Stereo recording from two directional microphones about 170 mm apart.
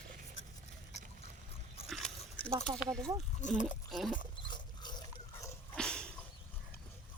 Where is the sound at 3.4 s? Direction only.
45° left (ahead or behind).